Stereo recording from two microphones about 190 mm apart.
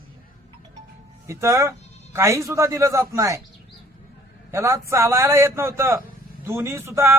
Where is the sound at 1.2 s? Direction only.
15° right (ahead or behind).